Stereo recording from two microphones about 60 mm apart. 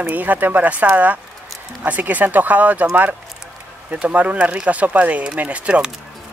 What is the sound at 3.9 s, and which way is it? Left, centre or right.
Speech, right.